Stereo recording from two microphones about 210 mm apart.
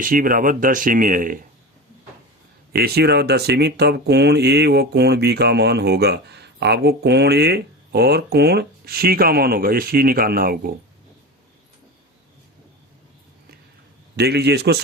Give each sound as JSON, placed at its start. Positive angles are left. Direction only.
{"t": 0.0, "sound": "speech", "side_deg": -40}
{"t": 2.7, "sound": "speech", "side_deg": -50}
{"t": 14.2, "sound": "speech", "side_deg": -50}